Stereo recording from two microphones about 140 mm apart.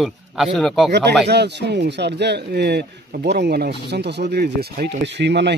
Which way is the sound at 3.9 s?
90° right.